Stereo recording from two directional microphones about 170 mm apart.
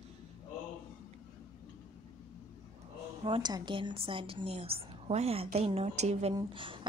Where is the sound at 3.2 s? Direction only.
30° right (ahead or behind).